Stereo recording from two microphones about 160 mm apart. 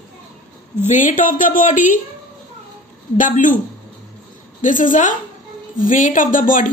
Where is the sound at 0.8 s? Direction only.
50° left (ahead or behind).